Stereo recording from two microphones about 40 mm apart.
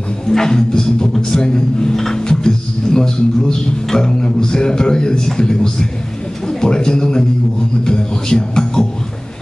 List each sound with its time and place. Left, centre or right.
0.3 s speech: centre